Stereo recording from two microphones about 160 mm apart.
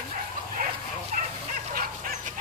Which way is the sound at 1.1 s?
55° right (ahead or behind).